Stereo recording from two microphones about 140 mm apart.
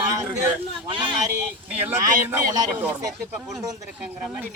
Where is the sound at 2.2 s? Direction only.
20° right (ahead or behind).